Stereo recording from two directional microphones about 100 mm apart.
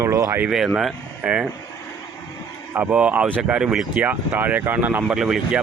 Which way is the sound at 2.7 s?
15° right (ahead or behind).